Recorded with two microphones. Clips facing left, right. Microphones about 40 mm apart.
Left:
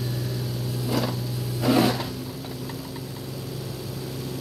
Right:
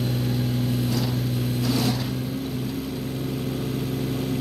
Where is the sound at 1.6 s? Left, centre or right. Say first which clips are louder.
Left 6 dB; left.